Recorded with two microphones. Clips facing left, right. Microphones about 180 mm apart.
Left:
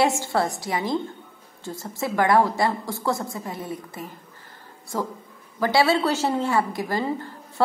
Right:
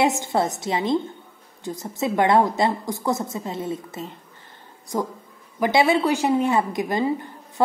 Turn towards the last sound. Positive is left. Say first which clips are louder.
# right 2 dB
turn(degrees=-20)  # may be behind; listen again after turning